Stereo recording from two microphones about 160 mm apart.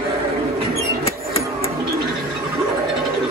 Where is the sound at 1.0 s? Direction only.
40° left (ahead or behind).